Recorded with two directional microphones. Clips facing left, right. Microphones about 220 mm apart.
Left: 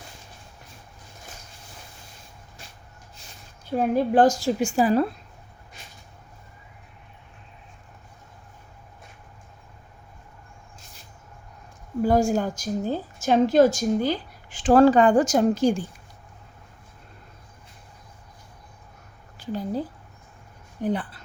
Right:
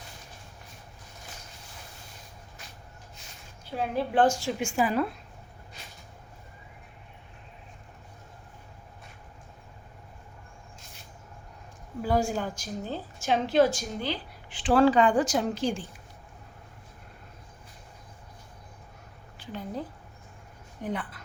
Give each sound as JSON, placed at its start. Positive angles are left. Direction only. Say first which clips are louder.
{"t": 3.7, "sound": "a woman's voice", "louder": "left 8 dB", "side_deg": 45}
{"t": 12.0, "sound": "a woman's voice", "louder": "left 6 dB", "side_deg": 45}
{"t": 19.4, "sound": "speech", "louder": "left 8 dB", "side_deg": 35}
{"t": 20.8, "sound": "a woman's voice", "louder": "left 7 dB", "side_deg": 30}